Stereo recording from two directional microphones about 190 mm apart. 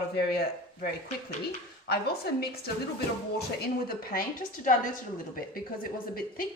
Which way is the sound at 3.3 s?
55° left (ahead or behind).